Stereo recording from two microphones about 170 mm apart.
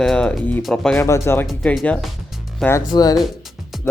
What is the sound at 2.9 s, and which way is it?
Speech, 25° left (ahead or behind).